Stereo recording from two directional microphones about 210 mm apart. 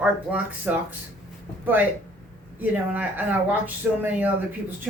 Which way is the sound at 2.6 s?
10° right (ahead or behind).